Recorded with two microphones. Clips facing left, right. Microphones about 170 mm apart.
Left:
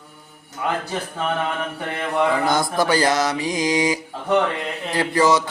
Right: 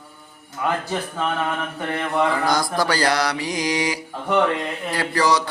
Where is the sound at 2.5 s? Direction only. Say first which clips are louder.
Left 2 dB; 25° left (ahead or behind).